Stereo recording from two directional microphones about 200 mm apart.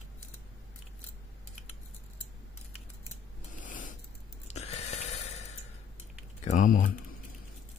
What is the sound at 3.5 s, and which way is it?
Pulleys, 40° left (ahead or behind).